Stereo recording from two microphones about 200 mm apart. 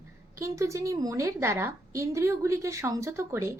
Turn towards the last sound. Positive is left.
turn(degrees=-15)  # may be behind; listen again after turning